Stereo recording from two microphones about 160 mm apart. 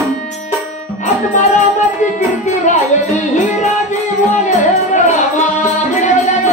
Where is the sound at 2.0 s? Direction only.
50° left (ahead or behind).